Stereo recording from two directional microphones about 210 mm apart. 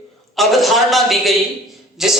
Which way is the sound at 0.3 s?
Centre (ahead or behind).